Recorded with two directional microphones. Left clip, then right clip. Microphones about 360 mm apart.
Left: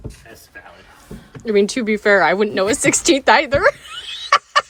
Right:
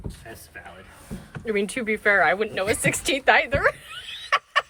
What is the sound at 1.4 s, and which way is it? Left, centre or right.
Speech, centre.